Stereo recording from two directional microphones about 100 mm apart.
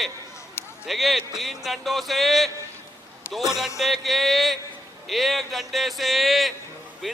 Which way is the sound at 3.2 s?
25° left (ahead or behind).